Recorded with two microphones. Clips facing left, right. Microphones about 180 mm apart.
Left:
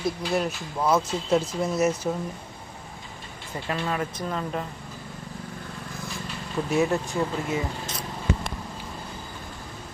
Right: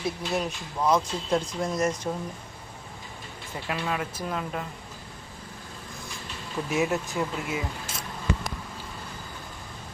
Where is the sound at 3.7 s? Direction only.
5° right (ahead or behind).